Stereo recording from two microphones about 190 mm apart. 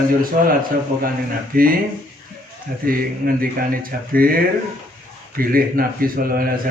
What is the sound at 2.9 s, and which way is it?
Speech, 50° right (ahead or behind).